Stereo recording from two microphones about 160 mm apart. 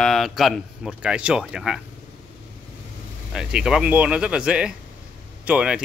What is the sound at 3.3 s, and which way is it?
Speech, 5° right (ahead or behind).